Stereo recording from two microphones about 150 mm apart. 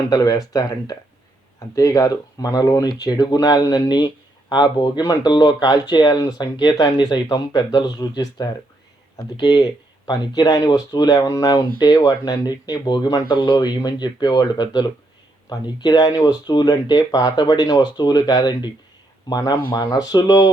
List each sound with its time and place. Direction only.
0.1 s speech: 25° left (ahead or behind)